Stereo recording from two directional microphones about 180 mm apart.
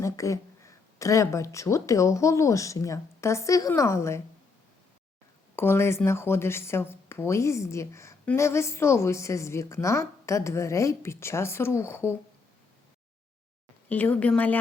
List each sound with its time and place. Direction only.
0.0 s speech: 15° left (ahead or behind)
5.5 s speech: 15° left (ahead or behind)
13.9 s speech: 10° left (ahead or behind)